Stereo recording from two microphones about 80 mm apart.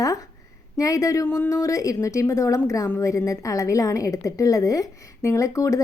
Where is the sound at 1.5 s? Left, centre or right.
Left.